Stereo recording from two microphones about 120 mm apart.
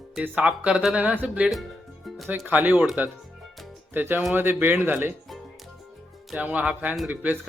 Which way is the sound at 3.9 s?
15° right (ahead or behind).